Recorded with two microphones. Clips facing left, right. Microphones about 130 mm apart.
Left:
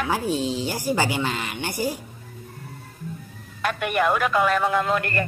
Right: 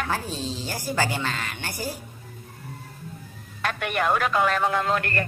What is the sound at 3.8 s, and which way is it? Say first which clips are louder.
Speech: left 2 dB; 5° left (ahead or behind).